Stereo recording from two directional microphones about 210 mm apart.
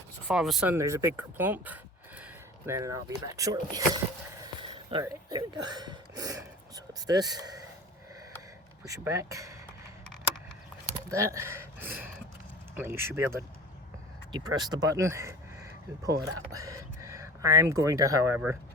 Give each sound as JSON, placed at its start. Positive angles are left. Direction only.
{"t": 0.3, "sound": "speech", "side_deg": 0}
{"t": 4.9, "sound": "speech", "side_deg": -20}
{"t": 8.8, "sound": "speech", "side_deg": -15}
{"t": 10.9, "sound": "speech", "side_deg": -15}